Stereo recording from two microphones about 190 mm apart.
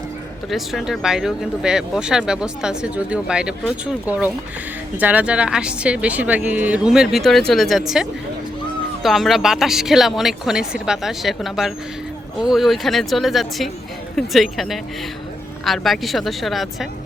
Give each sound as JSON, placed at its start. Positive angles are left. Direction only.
{"t": 0.5, "sound": "speech", "side_deg": 0}
{"t": 9.0, "sound": "speech", "side_deg": 0}